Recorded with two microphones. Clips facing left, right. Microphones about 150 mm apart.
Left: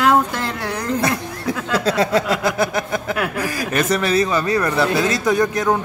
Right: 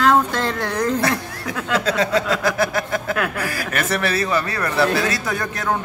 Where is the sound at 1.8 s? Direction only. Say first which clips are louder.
Left 3 dB; 40° left (ahead or behind).